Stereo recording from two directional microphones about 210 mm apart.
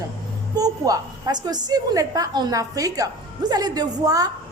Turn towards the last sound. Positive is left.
turn(degrees=-15)  # may be behind; listen again after turning